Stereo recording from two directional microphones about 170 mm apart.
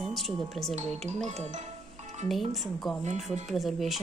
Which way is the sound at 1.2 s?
40° right (ahead or behind).